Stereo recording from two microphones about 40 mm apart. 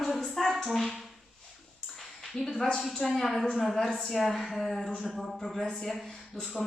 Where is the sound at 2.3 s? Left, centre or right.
Centre.